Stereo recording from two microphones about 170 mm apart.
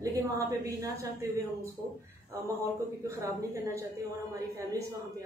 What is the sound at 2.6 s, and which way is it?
Speech, 15° right (ahead or behind).